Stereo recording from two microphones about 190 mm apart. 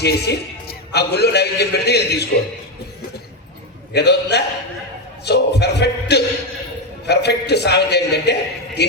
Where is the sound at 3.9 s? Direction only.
60° left (ahead or behind).